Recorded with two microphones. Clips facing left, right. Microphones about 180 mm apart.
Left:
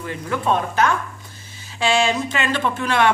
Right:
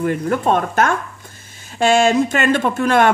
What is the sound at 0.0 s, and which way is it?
Speech, 50° right (ahead or behind).